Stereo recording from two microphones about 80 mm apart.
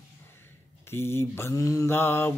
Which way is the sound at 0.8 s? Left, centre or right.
Left.